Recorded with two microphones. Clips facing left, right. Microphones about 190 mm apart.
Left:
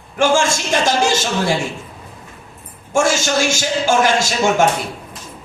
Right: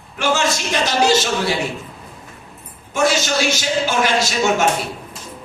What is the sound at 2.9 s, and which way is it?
Speech, 50° left (ahead or behind).